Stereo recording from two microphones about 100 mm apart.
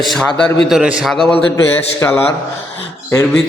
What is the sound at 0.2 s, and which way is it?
A man's voice, 5° left (ahead or behind).